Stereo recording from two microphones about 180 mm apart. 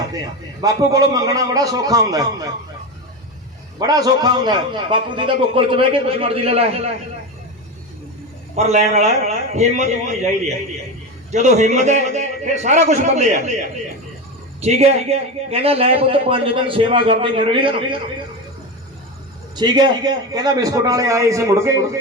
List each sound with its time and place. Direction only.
0.6 s a man's voice: 20° right (ahead or behind)
3.8 s a man's voice: 20° right (ahead or behind)
8.5 s a man's voice: 40° right (ahead or behind)
19.5 s a man's voice: 25° right (ahead or behind)